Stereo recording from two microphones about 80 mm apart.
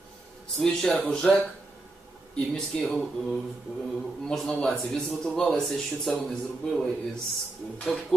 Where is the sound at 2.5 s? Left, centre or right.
Centre.